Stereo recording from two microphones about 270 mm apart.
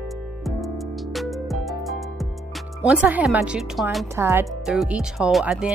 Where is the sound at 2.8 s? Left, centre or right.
Centre.